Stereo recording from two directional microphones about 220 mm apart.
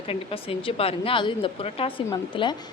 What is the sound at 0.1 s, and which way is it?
A woman's voice, 25° left (ahead or behind).